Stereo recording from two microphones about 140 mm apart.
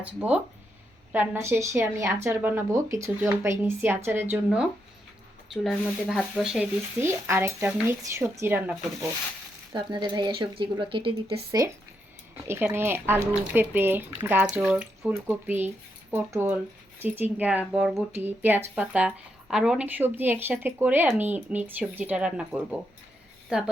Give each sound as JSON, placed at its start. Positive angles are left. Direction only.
{"t": 0.0, "sound": "speech", "side_deg": -10}
{"t": 5.6, "sound": "speech", "side_deg": 0}
{"t": 7.0, "sound": "speech", "side_deg": -20}
{"t": 9.7, "sound": "a woman's voice", "side_deg": -35}
{"t": 12.5, "sound": "speech", "side_deg": -15}